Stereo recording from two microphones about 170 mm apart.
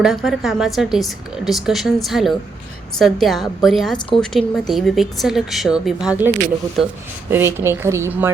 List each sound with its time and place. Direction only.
0.0 s a woman's voice: centre (ahead or behind)
7.3 s speech: 15° right (ahead or behind)